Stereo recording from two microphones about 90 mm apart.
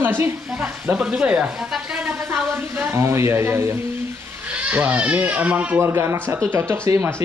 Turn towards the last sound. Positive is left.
turn(degrees=-25)  # may be behind; listen again after turning